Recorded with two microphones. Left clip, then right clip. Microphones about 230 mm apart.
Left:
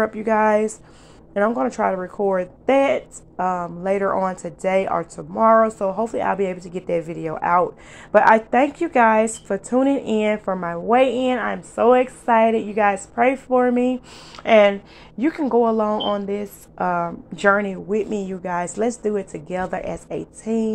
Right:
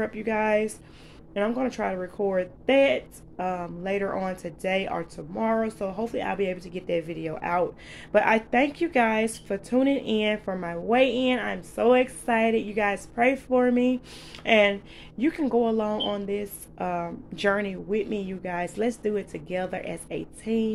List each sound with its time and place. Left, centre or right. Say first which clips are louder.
0.2 s a woman's voice: left 6 dB; centre